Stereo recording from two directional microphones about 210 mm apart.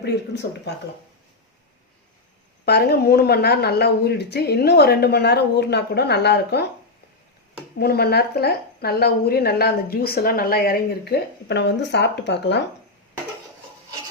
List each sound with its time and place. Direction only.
0.7 s a woman's voice: 55° left (ahead or behind)
2.6 s a woman's voice: 50° left (ahead or behind)
7.8 s a woman's voice: 50° left (ahead or behind)